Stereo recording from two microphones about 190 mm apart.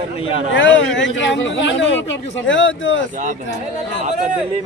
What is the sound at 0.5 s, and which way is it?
Speech, 75° left (ahead or behind).